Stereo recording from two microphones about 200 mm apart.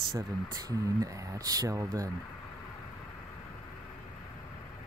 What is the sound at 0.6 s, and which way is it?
Speech, 15° right (ahead or behind).